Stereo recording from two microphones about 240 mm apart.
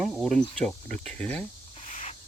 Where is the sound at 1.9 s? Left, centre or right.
Left.